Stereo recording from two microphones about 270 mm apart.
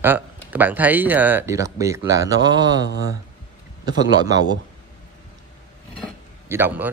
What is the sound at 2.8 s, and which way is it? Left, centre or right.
Speech, left.